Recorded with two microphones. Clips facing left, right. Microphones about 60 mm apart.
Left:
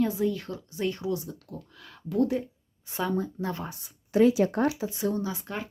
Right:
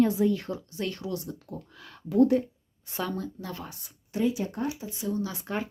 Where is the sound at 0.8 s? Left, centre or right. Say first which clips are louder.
Left 5 dB; centre.